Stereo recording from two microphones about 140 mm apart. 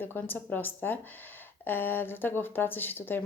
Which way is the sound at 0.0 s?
15° left (ahead or behind).